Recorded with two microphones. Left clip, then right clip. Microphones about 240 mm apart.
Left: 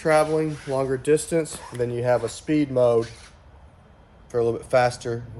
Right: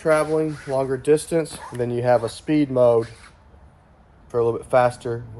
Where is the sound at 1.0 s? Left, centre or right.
Centre.